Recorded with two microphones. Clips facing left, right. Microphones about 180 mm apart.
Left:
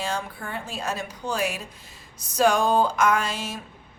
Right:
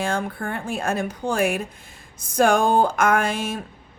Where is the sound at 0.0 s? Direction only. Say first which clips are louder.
Right 5 dB; 55° right (ahead or behind).